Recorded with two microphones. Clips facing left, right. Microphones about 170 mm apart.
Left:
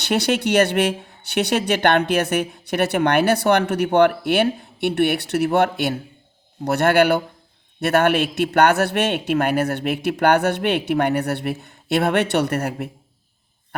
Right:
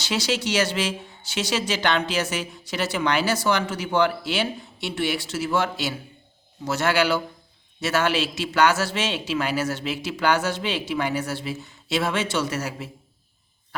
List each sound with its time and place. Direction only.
0.0 s speech: 60° left (ahead or behind)